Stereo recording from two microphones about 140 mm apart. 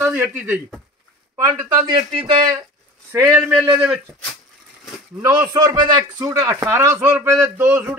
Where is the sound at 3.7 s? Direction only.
5° right (ahead or behind).